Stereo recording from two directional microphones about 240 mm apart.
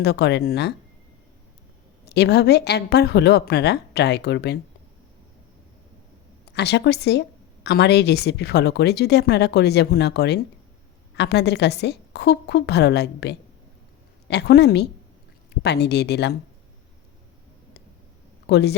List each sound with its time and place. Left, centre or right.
0.0 s a woman's voice: left
2.0 s a woman's voice: left
6.5 s a woman's voice: left
18.4 s speech: left